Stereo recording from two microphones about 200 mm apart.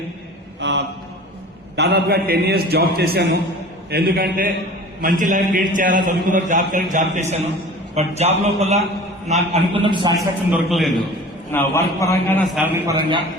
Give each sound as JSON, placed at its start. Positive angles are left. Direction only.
{"t": 0.6, "sound": "a sound", "side_deg": -60}
{"t": 1.7, "sound": "a man's voice", "side_deg": -55}
{"t": 10.7, "sound": "a man's voice", "side_deg": 0}
{"t": 11.5, "sound": "a man's voice", "side_deg": 15}
{"t": 12.5, "sound": "a man's voice", "side_deg": -10}